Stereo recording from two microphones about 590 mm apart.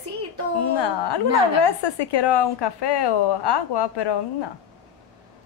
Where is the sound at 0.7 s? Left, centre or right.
Left.